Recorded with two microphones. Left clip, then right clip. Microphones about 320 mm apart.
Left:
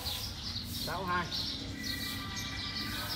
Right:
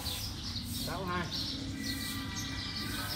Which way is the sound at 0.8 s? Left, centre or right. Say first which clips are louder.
Left 4 dB; centre.